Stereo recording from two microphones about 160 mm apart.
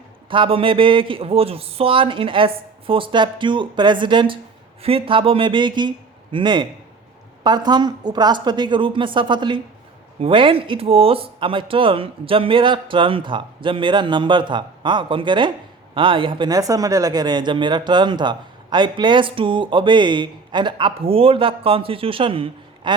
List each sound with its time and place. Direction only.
0.3 s speech: 35° right (ahead or behind)